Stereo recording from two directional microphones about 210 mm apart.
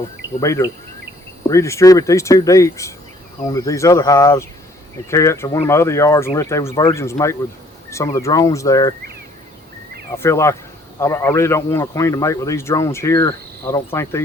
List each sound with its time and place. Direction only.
0.3 s a man's voice: 15° left (ahead or behind)
10.2 s a man's voice: 15° left (ahead or behind)